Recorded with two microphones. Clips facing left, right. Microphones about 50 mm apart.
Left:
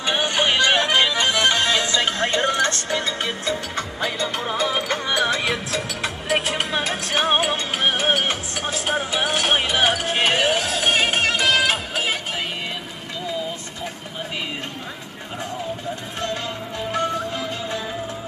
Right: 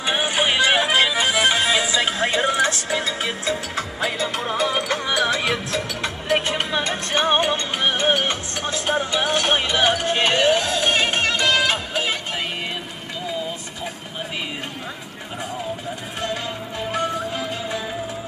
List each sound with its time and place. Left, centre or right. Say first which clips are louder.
0.0 s music: even; centre